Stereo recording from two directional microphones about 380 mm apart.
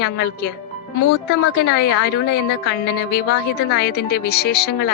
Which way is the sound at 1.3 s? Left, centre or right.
Left.